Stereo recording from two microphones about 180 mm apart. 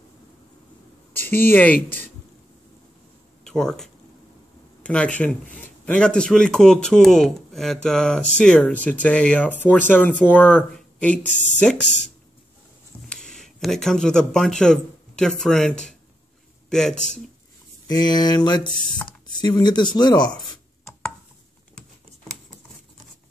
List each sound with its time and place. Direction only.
1.1 s speech: 10° left (ahead or behind)
3.4 s a man's voice: 5° left (ahead or behind)
13.1 s speech: 5° left (ahead or behind)
17.8 s speech: 25° left (ahead or behind)